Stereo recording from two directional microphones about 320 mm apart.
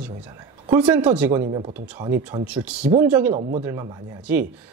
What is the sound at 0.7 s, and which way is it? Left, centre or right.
Speech, centre.